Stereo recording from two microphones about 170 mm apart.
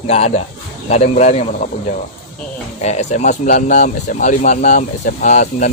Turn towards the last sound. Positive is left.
turn(degrees=45)  # may be behind; listen again after turning